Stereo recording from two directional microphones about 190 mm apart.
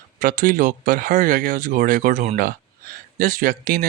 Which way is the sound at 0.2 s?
45° right (ahead or behind).